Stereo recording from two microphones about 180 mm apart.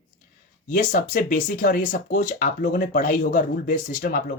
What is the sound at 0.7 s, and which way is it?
Speech, 45° left (ahead or behind).